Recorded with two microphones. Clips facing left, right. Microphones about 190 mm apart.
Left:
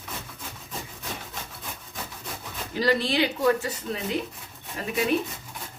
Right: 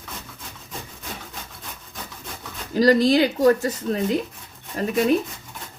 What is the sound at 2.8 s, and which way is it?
Speech, 40° right (ahead or behind).